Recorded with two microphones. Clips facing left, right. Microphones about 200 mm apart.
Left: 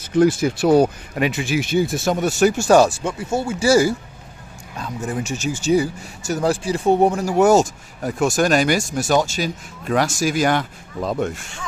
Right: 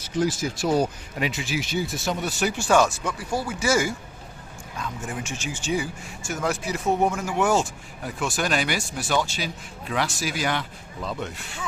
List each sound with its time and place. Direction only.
0.0 s speech: 60° left (ahead or behind)